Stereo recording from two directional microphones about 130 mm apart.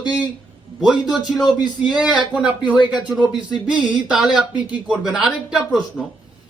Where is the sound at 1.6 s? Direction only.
35° left (ahead or behind).